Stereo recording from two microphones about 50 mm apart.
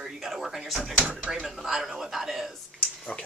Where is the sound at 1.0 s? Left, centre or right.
Right.